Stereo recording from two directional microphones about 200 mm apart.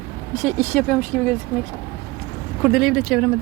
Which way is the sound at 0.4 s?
5° left (ahead or behind).